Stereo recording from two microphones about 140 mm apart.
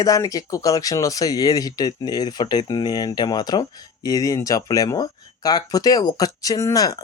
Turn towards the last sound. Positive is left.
turn(degrees=25)  # may be behind; listen again after turning